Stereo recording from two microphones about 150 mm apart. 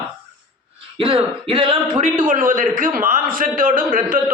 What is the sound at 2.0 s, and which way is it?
A man's voice, 60° right (ahead or behind).